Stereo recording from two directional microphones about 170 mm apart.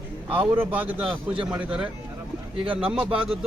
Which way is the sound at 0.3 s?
10° right (ahead or behind).